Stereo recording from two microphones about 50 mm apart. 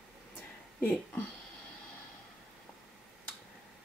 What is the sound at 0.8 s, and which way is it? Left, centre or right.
Speech, left.